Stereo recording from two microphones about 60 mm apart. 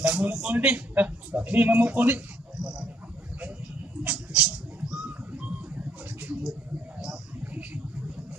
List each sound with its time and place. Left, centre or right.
0.0 s a man's voice: right
4.0 s mouse: right
4.9 s a sound: right